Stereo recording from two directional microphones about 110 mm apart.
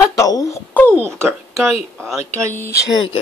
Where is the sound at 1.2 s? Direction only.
25° right (ahead or behind).